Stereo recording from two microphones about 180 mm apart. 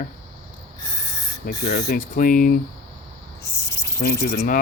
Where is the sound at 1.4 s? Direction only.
65° left (ahead or behind).